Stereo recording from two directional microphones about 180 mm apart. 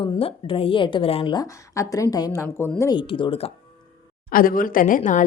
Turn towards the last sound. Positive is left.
turn(degrees=45)  # may be behind; listen again after turning